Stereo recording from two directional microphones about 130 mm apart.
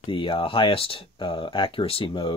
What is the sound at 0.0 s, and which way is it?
Speech, 40° left (ahead or behind).